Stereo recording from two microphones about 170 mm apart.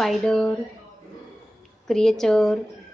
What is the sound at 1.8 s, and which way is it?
Speech, centre (ahead or behind).